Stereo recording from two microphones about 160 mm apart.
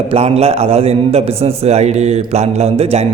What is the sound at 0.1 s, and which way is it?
A man's voice, 40° right (ahead or behind).